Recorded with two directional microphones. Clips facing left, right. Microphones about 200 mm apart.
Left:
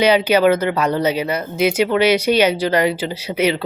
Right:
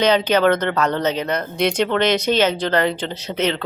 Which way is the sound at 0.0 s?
10° left (ahead or behind).